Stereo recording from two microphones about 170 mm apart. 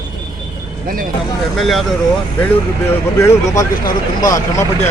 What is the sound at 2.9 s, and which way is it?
Speech, 15° left (ahead or behind).